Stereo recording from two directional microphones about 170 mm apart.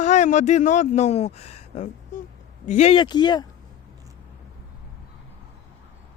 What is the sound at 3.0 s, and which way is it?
Speech, 25° left (ahead or behind).